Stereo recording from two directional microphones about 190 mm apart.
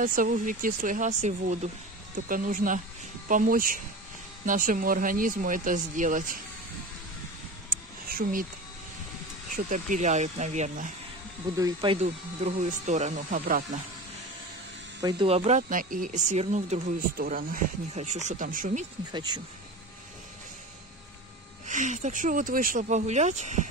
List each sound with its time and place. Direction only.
0.0 s speech: 45° right (ahead or behind)
8.1 s speech: 45° right (ahead or behind)
9.5 s speech: 45° right (ahead or behind)
11.5 s speech: 20° right (ahead or behind)
12.4 s speech: 40° right (ahead or behind)
15.0 s speech: 25° right (ahead or behind)
17.2 s speech: 50° right (ahead or behind)
19.1 s speech: 20° right (ahead or behind)
21.6 s speech: 40° right (ahead or behind)